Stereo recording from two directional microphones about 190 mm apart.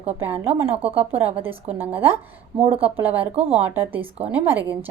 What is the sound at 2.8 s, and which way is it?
A woman's voice, 10° right (ahead or behind).